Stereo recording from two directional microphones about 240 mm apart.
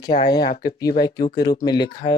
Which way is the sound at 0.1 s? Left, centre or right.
Left.